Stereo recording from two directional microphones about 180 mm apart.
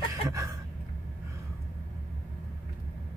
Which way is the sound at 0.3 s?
15° right (ahead or behind).